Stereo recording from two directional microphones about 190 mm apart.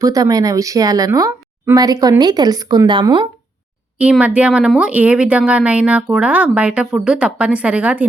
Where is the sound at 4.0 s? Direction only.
5° right (ahead or behind).